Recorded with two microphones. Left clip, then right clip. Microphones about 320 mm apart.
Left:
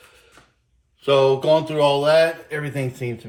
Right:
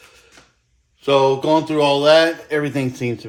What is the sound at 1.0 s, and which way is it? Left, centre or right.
Speech, centre.